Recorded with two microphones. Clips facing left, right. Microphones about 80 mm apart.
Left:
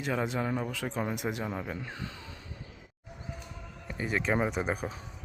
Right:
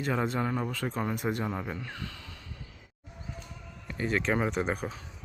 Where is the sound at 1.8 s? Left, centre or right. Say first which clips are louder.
Even; left.